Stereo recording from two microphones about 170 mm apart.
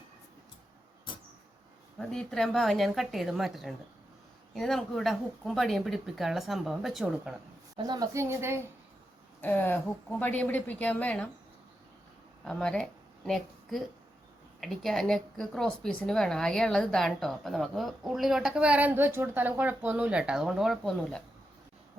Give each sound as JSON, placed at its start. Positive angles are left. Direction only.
{"t": 2.0, "sound": "a woman's voice", "side_deg": 5}
{"t": 7.8, "sound": "a woman's voice", "side_deg": -25}
{"t": 9.4, "sound": "speech", "side_deg": 10}
{"t": 12.5, "sound": "a woman's voice", "side_deg": 5}